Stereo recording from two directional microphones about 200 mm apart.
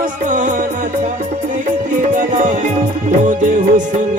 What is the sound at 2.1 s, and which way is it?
Music, 40° right (ahead or behind).